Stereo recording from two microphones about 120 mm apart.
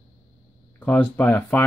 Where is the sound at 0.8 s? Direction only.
15° left (ahead or behind).